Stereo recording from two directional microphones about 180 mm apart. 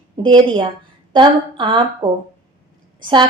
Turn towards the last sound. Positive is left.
turn(degrees=-25)  # may be behind; listen again after turning